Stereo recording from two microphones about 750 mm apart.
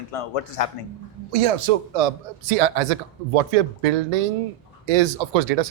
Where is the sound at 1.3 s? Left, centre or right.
Right.